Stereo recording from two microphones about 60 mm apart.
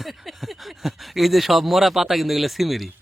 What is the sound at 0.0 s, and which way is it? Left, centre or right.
A woman's voice, centre.